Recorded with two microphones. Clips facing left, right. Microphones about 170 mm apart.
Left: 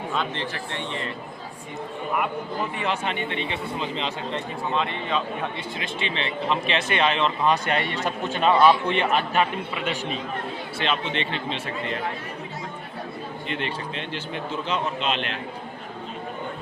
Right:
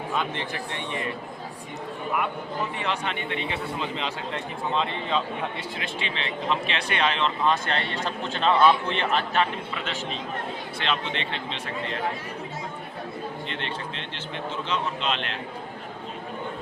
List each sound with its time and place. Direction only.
0.1 s a man's voice: 15° right (ahead or behind)
2.8 s a man's voice: 5° left (ahead or behind)
5.7 s a man's voice: centre (ahead or behind)
13.5 s a man's voice: 5° left (ahead or behind)